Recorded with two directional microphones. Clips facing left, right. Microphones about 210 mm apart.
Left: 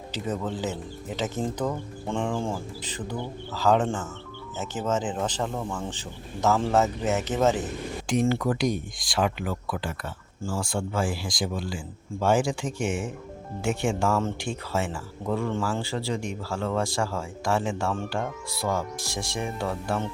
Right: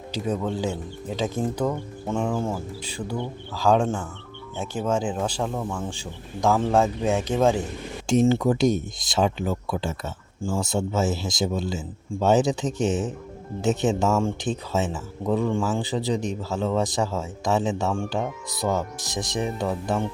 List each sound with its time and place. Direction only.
0.5 s speech: 10° right (ahead or behind)
8.3 s speech: 25° right (ahead or behind)